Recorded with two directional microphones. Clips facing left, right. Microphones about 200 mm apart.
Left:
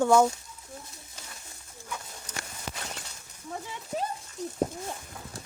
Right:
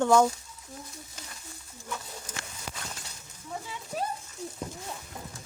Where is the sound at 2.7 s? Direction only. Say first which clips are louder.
Left 2 dB; 5° right (ahead or behind).